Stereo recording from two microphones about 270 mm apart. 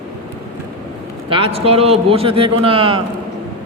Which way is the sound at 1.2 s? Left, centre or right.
Centre.